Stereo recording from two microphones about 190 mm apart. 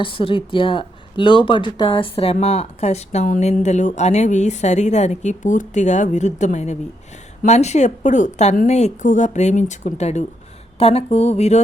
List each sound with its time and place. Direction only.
0.0 s speech: 30° left (ahead or behind)